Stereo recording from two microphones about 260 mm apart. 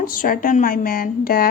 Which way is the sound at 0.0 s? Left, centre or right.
Left.